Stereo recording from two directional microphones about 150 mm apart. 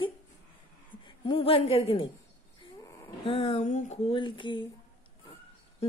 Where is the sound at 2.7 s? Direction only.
25° left (ahead or behind).